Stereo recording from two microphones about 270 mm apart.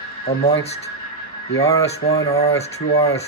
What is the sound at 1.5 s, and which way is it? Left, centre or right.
Speech, centre.